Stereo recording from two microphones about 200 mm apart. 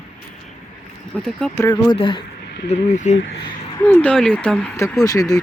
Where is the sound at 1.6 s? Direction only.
20° left (ahead or behind).